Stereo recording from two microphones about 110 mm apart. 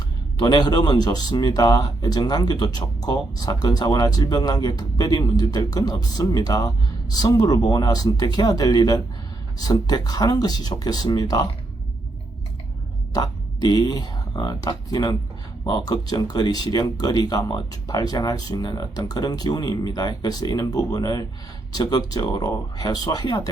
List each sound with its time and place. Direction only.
0.3 s a man's voice: 40° left (ahead or behind)
13.1 s a man's voice: 35° left (ahead or behind)